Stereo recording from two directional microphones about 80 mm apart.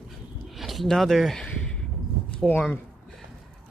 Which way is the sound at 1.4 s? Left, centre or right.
Centre.